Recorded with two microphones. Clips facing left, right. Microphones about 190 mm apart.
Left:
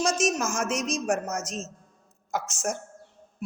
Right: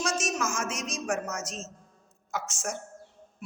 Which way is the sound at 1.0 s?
55° left (ahead or behind).